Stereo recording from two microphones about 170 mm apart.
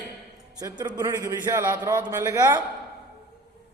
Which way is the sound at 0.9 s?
20° right (ahead or behind).